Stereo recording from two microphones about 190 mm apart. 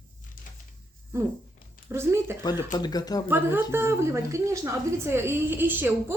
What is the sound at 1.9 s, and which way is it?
Speech, 15° right (ahead or behind).